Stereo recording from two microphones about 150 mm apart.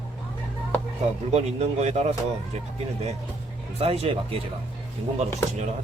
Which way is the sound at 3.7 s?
45° right (ahead or behind).